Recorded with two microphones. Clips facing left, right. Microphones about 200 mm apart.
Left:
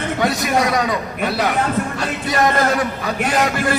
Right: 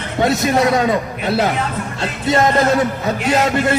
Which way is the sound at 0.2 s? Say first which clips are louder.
Right 5 dB; 25° right (ahead or behind).